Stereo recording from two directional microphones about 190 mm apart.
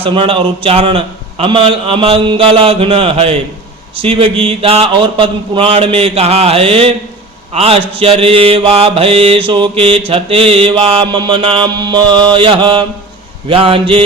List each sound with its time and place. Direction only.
0.0 s a man's voice: 25° right (ahead or behind)
7.5 s mantra: 30° right (ahead or behind)
10.1 s a man's voice: 30° right (ahead or behind)